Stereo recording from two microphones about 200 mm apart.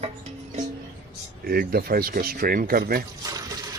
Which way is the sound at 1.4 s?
50° right (ahead or behind).